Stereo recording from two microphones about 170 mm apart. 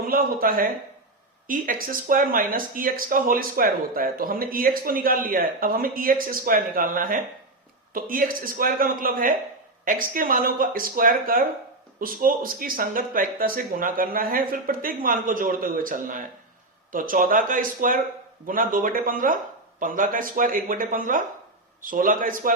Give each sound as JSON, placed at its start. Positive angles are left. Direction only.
{"t": 0.1, "sound": "speech", "side_deg": -60}